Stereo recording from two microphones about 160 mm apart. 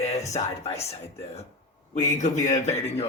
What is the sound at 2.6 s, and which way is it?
Speech, 40° left (ahead or behind).